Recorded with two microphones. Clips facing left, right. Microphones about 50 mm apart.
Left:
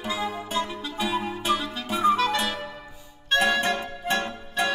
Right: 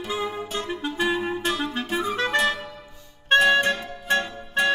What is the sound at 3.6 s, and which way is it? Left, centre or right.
Music, left.